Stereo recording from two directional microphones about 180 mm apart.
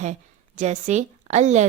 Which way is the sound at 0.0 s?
40° right (ahead or behind).